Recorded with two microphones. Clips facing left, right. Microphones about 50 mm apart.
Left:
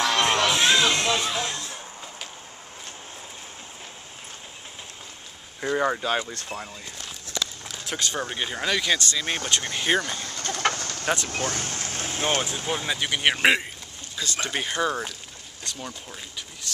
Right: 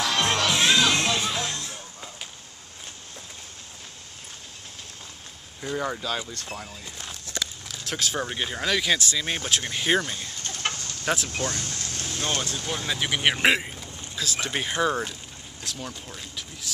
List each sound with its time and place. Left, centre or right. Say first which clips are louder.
0.0 s music: left 2 dB; left
5.6 s speech: left 5 dB; left
6.4 s speech: left 2 dB; centre
10.2 s bird: left 5 dB; left
10.7 s bird: left 5 dB; left
11.2 s speech: left 1 dB; left; by 12.9 s centre
12.9 s speech: right 1 dB; centre